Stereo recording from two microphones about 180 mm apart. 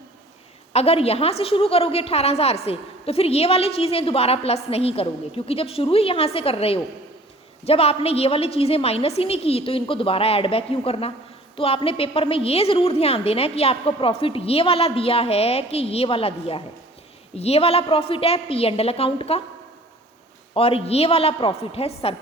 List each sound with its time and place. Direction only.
0.7 s a woman's voice: 35° left (ahead or behind)
20.5 s a woman's voice: 30° left (ahead or behind)